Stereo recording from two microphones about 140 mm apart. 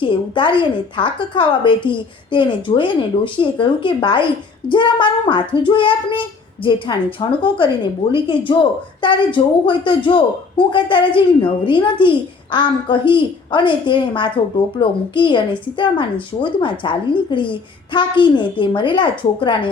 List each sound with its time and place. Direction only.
0.0 s a child's voice: 35° left (ahead or behind)